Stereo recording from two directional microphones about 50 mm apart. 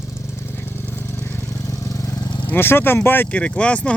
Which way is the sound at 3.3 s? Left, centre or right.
Left.